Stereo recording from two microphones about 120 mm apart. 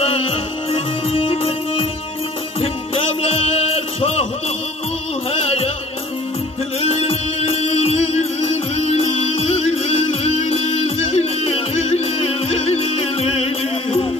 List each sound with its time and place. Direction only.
0.0 s music: 55° left (ahead or behind)
5.3 s music: 55° left (ahead or behind)
6.8 s music: 60° left (ahead or behind)